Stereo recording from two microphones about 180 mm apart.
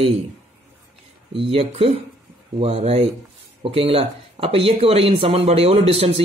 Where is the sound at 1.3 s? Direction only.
30° right (ahead or behind).